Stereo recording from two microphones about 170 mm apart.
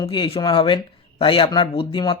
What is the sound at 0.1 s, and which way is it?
Speech, 30° left (ahead or behind).